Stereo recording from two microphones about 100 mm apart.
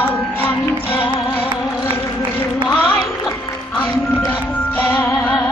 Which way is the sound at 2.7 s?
15° left (ahead or behind).